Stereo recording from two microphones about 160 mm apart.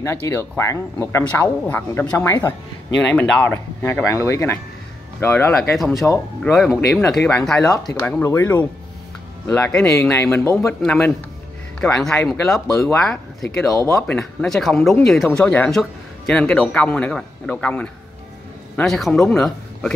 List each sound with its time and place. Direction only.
0.0 s a man's voice: 15° left (ahead or behind)
6.5 s a man's voice: centre (ahead or behind)